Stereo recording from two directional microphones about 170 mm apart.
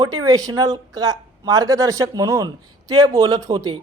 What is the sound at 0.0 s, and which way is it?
Speech, 20° right (ahead or behind).